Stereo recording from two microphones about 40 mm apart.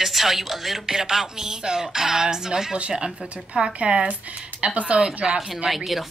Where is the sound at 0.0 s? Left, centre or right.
Centre.